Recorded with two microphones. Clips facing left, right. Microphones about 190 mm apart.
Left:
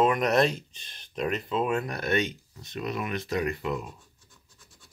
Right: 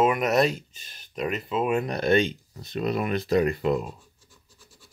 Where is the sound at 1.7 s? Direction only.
20° right (ahead or behind).